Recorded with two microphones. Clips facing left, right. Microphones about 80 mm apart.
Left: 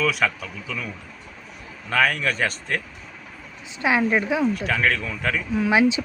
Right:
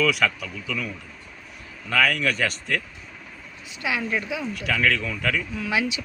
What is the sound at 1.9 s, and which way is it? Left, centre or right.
Speech, left.